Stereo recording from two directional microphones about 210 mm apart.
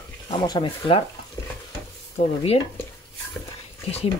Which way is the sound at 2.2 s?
30° left (ahead or behind).